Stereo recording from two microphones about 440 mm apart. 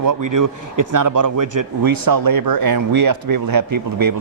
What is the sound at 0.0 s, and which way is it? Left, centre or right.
Speech, right.